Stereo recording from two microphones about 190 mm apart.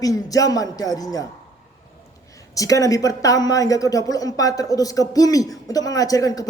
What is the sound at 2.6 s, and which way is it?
Speech, 20° left (ahead or behind).